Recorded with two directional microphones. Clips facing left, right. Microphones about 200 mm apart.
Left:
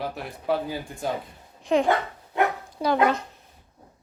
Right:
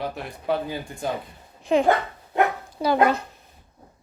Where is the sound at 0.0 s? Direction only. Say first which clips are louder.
Right 1 dB; centre (ahead or behind).